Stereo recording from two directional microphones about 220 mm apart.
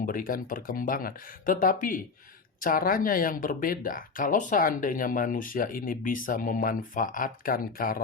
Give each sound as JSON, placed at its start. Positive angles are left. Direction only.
{"t": 0.0, "sound": "speech", "side_deg": 40}